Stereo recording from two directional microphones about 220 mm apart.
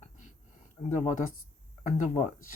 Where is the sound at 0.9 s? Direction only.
35° left (ahead or behind).